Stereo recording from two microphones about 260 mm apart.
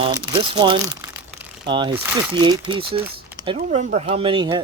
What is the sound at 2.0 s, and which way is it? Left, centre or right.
Speech, centre.